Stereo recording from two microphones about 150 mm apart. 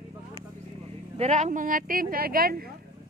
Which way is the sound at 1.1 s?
50° right (ahead or behind).